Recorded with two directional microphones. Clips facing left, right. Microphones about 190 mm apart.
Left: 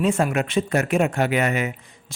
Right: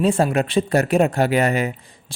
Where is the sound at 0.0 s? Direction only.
30° right (ahead or behind).